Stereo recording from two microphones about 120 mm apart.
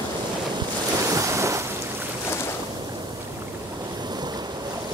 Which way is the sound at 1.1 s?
25° right (ahead or behind).